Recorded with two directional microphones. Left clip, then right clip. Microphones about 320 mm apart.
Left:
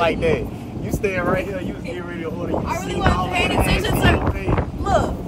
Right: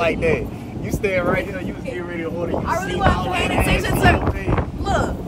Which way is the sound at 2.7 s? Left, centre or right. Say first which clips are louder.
Right 3 dB; left.